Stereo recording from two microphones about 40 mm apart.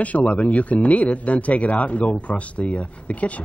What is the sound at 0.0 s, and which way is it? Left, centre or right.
Speech, left.